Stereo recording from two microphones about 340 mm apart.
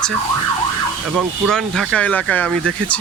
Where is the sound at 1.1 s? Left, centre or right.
Centre.